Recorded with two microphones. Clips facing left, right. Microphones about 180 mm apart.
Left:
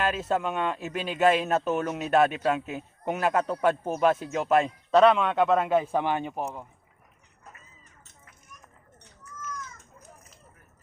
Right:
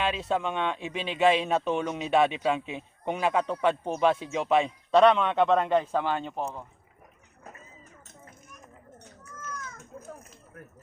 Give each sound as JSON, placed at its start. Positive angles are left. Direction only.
{"t": 0.0, "sound": "speech", "side_deg": 5}
{"t": 9.5, "sound": "cat", "side_deg": -55}